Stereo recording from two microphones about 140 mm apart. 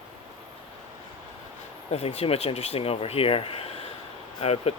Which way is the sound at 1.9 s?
45° left (ahead or behind).